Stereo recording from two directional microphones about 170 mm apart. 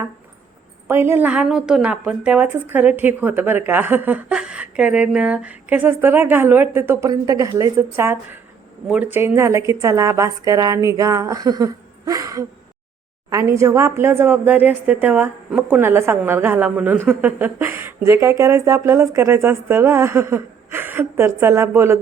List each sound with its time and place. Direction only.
0.9 s a woman's voice: 15° right (ahead or behind)